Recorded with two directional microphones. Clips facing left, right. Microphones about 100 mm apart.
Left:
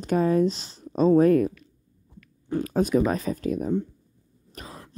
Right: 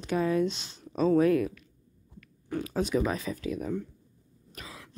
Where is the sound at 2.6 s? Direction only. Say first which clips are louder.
Left 6 dB; 45° left (ahead or behind).